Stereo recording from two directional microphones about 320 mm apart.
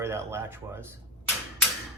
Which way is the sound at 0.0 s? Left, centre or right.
Centre.